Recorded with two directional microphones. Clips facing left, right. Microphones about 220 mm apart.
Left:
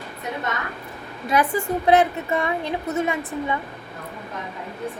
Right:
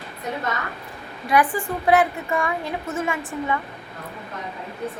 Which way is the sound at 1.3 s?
25° left (ahead or behind).